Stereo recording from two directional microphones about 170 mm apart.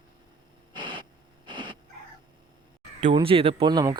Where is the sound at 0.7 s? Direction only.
30° right (ahead or behind).